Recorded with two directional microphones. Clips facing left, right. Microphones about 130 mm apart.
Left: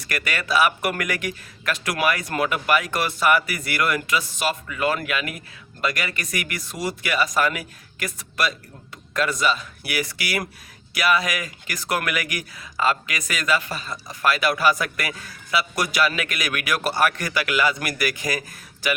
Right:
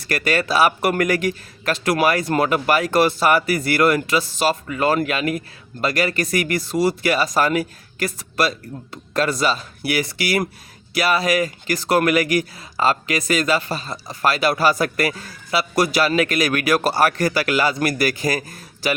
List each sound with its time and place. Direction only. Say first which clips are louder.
0.0 s speech: right 8 dB; 30° right (ahead or behind)